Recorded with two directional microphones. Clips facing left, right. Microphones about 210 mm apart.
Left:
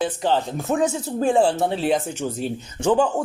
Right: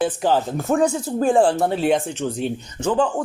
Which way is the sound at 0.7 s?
20° left (ahead or behind).